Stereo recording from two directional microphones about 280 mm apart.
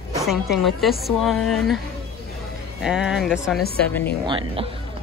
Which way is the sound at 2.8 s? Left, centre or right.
Centre.